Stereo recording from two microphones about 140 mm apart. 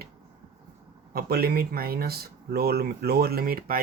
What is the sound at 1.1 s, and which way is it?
Speech, 90° right.